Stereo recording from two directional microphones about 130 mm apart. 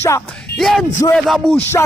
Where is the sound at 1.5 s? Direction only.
20° left (ahead or behind).